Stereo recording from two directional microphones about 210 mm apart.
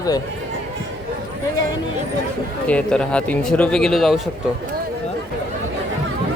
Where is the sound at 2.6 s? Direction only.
5° left (ahead or behind).